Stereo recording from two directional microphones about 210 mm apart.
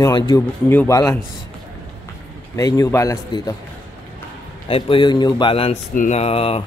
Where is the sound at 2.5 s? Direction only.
15° left (ahead or behind).